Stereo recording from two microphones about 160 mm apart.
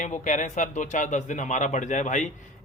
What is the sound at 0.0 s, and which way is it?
A man's voice, 50° left (ahead or behind).